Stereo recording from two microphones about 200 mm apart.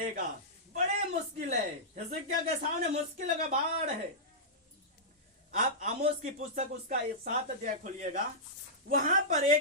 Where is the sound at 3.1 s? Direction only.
40° right (ahead or behind).